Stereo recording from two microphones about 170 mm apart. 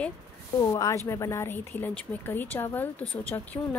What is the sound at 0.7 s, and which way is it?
Speech, 20° left (ahead or behind).